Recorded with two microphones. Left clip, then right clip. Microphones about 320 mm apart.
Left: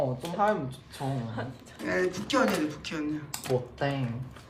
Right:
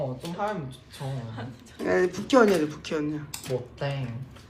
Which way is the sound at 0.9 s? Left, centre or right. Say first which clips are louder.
Left 3 dB; left.